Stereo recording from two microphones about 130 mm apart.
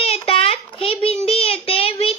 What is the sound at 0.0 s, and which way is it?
Child singing, 50° left (ahead or behind).